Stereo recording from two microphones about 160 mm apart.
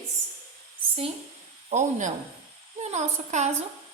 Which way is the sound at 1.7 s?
50° right (ahead or behind).